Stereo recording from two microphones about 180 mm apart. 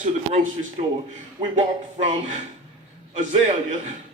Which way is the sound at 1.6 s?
40° right (ahead or behind).